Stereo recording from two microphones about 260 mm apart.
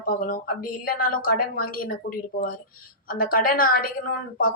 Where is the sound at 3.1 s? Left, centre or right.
Left.